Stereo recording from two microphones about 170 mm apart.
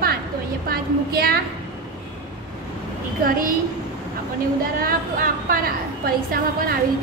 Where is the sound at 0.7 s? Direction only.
65° right (ahead or behind).